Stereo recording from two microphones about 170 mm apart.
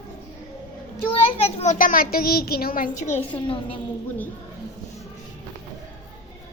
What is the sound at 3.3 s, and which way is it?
Speech, 30° left (ahead or behind).